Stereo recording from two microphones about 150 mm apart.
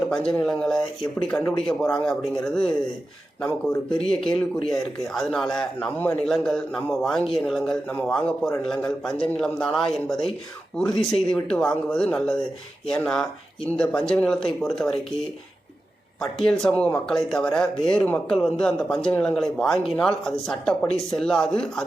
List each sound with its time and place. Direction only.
0.1 s speech: 5° left (ahead or behind)
3.8 s speech: 40° left (ahead or behind)
4.1 s speech: 5° left (ahead or behind)
16.5 s speech: 5° left (ahead or behind)